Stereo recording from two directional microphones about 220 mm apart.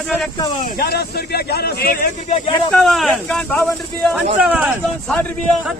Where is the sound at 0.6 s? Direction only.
45° left (ahead or behind).